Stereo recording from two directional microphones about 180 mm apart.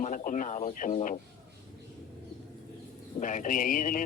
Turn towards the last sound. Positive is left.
turn(degrees=50)  # may be behind; listen again after turning